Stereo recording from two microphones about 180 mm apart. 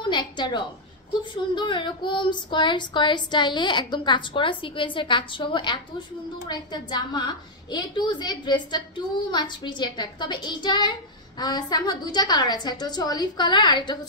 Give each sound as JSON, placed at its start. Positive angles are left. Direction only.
{"t": 0.1, "sound": "a woman's voice", "side_deg": 25}